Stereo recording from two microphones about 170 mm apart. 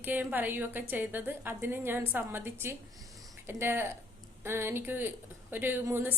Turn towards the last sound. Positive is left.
turn(degrees=-10)  # may be behind; listen again after turning